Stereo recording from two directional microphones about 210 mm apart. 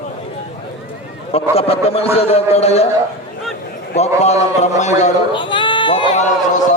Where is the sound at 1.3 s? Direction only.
30° left (ahead or behind).